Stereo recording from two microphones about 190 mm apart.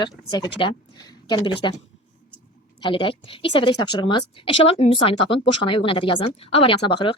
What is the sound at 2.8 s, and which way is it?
A woman's voice, 25° left (ahead or behind).